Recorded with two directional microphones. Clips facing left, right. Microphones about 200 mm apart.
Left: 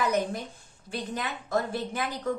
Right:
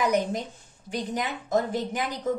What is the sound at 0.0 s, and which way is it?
Speech, 15° right (ahead or behind).